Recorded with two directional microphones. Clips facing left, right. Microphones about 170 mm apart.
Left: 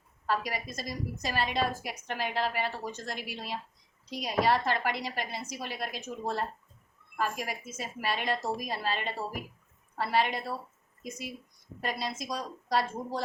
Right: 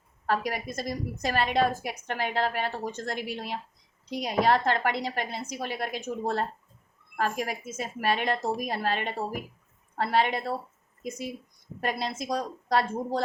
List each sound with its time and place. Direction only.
0.3 s a woman's voice: 55° right (ahead or behind)
11.8 s a woman's voice: 55° right (ahead or behind)